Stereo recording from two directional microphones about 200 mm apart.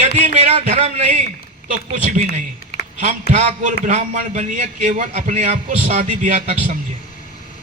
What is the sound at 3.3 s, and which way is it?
A man's voice, 35° right (ahead or behind).